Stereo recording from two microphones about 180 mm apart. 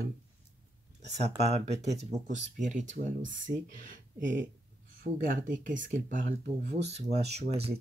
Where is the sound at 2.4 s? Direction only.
40° right (ahead or behind).